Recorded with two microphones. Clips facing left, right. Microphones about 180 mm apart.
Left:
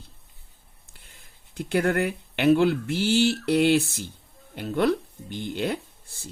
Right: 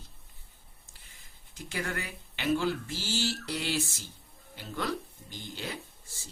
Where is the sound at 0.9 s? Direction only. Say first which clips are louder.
Left 7 dB; 60° left (ahead or behind).